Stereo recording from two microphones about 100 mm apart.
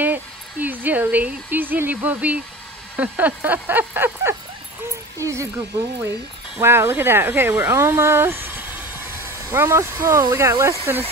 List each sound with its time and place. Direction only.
0.0 s speech: 20° right (ahead or behind)
6.6 s speech: 25° right (ahead or behind)